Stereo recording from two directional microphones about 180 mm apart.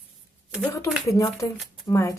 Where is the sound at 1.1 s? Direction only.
15° left (ahead or behind).